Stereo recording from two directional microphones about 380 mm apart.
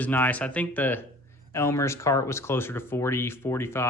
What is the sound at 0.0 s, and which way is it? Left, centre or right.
Speech, centre.